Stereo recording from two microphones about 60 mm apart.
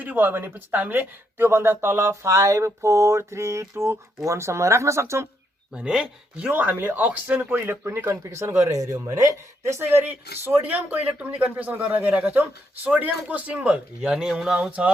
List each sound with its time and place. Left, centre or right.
0.0 s speech: right
5.9 s speech: centre
6.5 s speech: right
7.5 s speech: right
10.0 s speech: right; by 14.7 s centre